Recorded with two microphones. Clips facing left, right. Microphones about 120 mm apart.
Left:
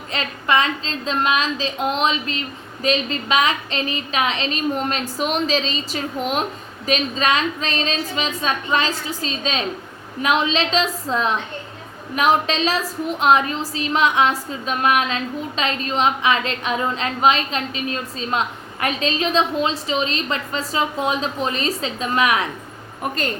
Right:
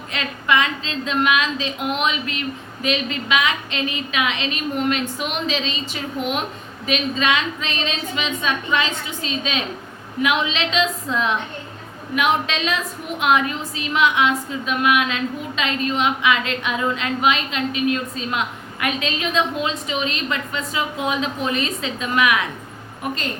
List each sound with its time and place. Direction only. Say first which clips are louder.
0.1 s a woman's voice: left 1 dB; 35° left (ahead or behind)